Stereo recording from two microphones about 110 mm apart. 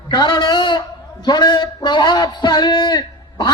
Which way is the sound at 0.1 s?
40° left (ahead or behind).